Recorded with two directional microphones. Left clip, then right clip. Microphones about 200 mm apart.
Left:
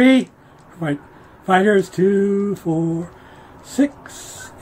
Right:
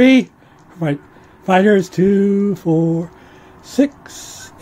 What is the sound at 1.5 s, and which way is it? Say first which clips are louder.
Speech: right 2 dB; 30° right (ahead or behind).